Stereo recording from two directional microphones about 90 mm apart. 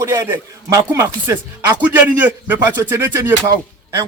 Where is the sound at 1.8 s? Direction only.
20° right (ahead or behind).